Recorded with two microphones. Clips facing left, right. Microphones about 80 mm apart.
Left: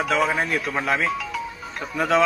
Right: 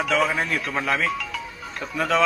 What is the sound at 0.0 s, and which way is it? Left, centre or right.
Speech, centre.